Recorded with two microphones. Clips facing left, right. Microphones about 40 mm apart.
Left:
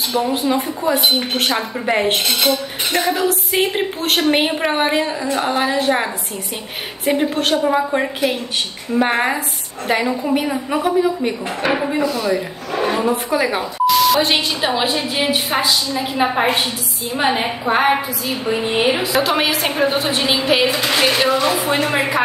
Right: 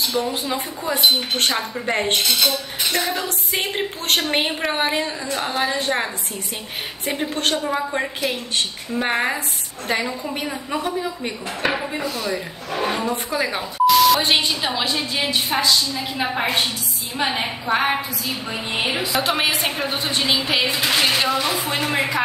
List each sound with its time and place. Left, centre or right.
0.2 s a woman's voice: centre
2.2 s speech: left
3.0 s a woman's voice: centre
7.1 s a woman's voice: centre
12.7 s a sound: centre
13.1 s a woman's voice: centre
13.8 s speech: centre
15.0 s a woman's voice: left; by 19.7 s centre
19.7 s a woman's voice: centre
21.9 s speech: left